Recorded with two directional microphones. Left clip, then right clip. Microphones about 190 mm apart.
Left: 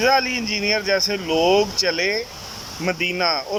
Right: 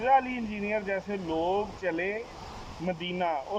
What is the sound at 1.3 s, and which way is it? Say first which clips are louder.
Speech: left 11 dB; 40° left (ahead or behind).